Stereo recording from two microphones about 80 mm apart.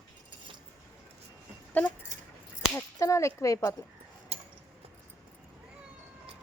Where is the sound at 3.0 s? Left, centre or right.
Left.